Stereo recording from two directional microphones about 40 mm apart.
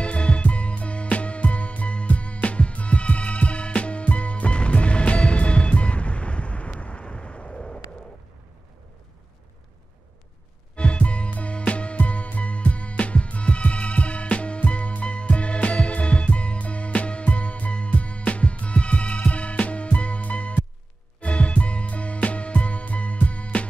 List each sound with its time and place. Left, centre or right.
0.0 s music: left
7.5 s a sound: centre
10.8 s music: left